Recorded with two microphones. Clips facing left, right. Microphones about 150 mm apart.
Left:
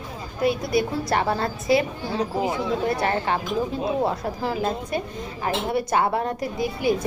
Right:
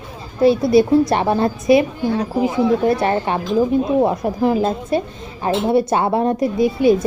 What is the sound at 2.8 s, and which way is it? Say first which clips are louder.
Speech: right 6 dB; 25° right (ahead or behind).